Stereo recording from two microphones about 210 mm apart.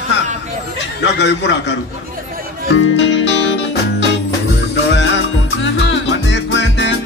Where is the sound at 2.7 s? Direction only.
60° left (ahead or behind).